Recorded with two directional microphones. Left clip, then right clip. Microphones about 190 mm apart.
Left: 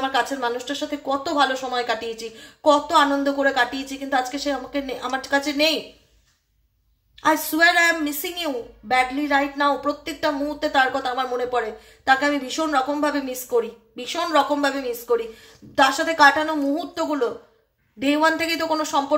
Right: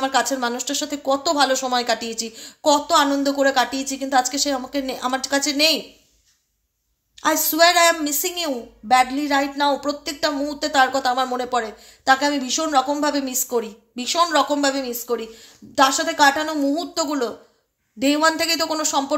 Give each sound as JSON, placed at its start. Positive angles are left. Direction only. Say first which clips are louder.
{"t": 0.0, "sound": "a woman's voice", "louder": "right 2 dB", "side_deg": -35}
{"t": 7.2, "sound": "a woman's voice", "louder": "right 1 dB", "side_deg": -30}